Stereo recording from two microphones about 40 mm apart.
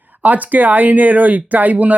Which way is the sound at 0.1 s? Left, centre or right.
Right.